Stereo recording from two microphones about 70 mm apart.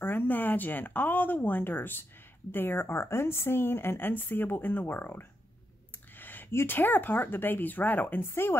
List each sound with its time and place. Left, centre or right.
0.0 s speech: left